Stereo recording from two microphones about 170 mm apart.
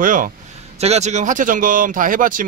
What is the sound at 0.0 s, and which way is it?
Speech, 55° right (ahead or behind).